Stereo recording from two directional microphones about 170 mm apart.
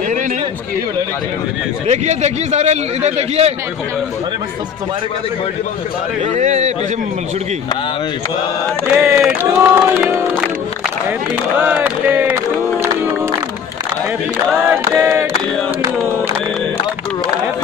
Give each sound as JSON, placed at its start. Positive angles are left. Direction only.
{"t": 1.9, "sound": "a man's voice", "side_deg": -40}
{"t": 6.3, "sound": "a man's voice", "side_deg": -45}
{"t": 8.9, "sound": "chant", "side_deg": -5}
{"t": 11.6, "sound": "chant", "side_deg": -10}
{"t": 14.5, "sound": "chant", "side_deg": -15}